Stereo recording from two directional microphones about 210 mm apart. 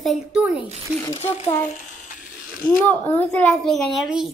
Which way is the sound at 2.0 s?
40° left (ahead or behind).